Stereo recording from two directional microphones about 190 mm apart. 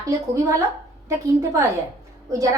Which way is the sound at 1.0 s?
15° right (ahead or behind).